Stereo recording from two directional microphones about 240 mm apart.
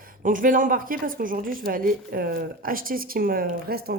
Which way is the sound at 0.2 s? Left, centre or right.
Right.